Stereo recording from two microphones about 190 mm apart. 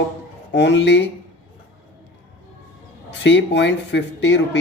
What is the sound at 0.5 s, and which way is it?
Speech, 65° left (ahead or behind).